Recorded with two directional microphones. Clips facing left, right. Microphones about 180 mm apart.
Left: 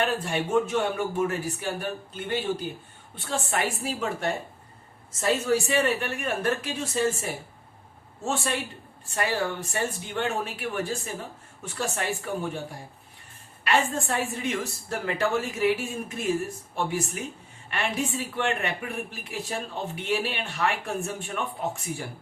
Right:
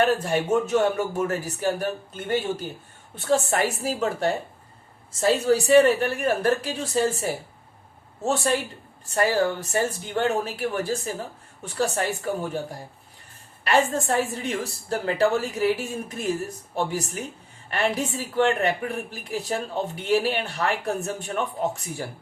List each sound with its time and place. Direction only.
0.0 s a man's voice: 45° right (ahead or behind)
13.7 s a woman's voice: 35° right (ahead or behind)